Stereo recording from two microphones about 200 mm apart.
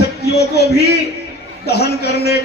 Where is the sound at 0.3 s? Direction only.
55° left (ahead or behind).